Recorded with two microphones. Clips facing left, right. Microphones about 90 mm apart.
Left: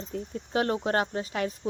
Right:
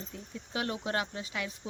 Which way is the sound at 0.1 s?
45° left (ahead or behind).